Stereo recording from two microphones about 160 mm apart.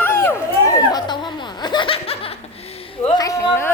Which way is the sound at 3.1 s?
20° left (ahead or behind).